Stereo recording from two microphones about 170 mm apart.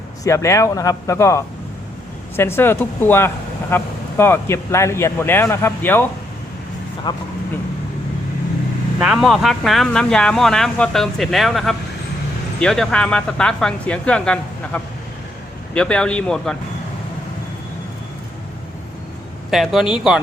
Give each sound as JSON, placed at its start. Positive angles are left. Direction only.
{"t": 0.3, "sound": "speech", "side_deg": 15}
{"t": 7.1, "sound": "speech", "side_deg": 25}
{"t": 9.0, "sound": "speech", "side_deg": -5}
{"t": 19.5, "sound": "speech", "side_deg": 0}